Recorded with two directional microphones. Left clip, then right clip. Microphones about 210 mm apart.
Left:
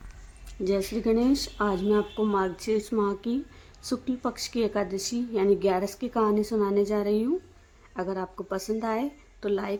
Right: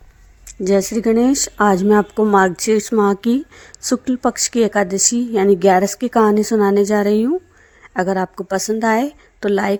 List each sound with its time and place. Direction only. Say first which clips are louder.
0.4 s speech: right 11 dB; 40° right (ahead or behind)